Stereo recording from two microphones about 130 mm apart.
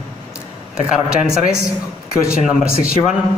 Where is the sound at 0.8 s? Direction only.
5° right (ahead or behind).